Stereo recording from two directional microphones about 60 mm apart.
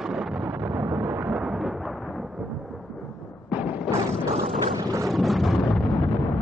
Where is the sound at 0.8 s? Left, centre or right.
Right.